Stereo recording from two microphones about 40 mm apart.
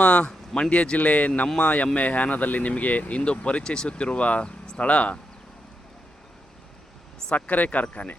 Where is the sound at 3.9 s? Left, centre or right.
Left.